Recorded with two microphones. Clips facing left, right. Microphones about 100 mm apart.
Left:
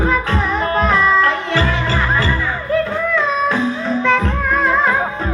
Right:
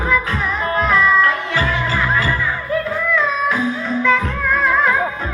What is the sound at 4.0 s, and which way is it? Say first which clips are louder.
Music: even; 25° left (ahead or behind).